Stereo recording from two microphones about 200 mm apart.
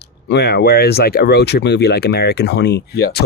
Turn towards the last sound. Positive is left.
turn(degrees=55)  # may be behind; listen again after turning